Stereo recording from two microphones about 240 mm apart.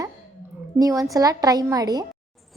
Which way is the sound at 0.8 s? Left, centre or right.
Centre.